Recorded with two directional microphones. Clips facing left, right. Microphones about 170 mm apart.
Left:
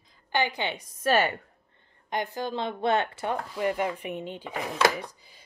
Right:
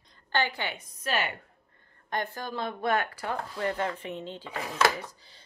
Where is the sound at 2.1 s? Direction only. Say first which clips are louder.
Left 3 dB; 15° left (ahead or behind).